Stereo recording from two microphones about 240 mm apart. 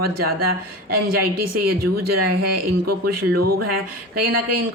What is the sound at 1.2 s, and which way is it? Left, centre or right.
Speech, right.